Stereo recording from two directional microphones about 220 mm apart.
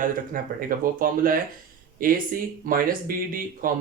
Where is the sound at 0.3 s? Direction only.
40° right (ahead or behind).